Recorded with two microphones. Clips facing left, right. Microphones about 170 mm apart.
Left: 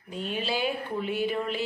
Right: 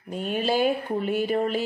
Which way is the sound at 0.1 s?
50° right (ahead or behind).